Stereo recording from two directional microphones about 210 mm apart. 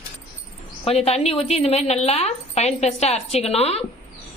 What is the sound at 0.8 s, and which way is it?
A woman's voice, 30° left (ahead or behind).